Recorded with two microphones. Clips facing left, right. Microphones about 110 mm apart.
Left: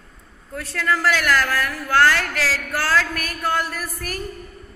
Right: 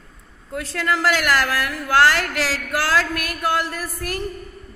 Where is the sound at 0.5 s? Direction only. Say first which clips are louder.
Even; 20° right (ahead or behind).